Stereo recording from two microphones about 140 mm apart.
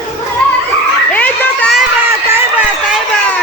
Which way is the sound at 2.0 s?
15° right (ahead or behind).